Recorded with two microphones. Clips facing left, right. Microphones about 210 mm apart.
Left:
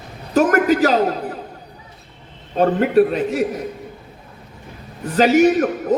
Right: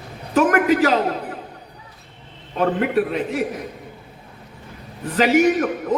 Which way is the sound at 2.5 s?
40° left (ahead or behind).